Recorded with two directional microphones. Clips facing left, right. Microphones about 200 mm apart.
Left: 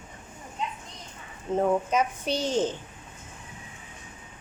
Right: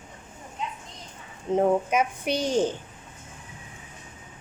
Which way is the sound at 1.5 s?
15° right (ahead or behind).